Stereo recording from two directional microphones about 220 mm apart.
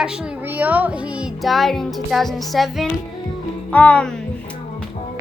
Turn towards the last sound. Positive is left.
turn(degrees=5)  # may be behind; listen again after turning